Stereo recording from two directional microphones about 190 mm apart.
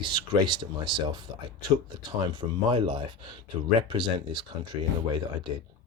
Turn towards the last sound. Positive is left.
turn(degrees=-25)  # may be behind; listen again after turning